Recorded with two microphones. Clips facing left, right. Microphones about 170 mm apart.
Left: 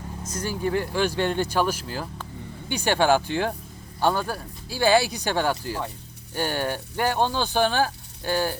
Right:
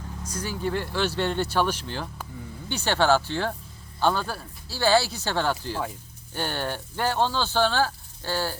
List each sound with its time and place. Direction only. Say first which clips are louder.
0.4 s speech: left 3 dB; 10° left (ahead or behind)